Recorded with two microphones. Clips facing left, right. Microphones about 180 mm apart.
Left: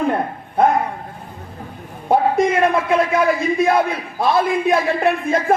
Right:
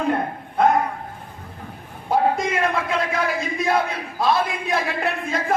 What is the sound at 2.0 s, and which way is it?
A man's voice, 55° left (ahead or behind).